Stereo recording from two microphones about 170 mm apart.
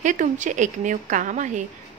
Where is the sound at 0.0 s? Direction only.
45° right (ahead or behind).